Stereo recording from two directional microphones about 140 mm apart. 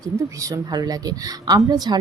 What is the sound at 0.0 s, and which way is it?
A woman's voice, 25° right (ahead or behind).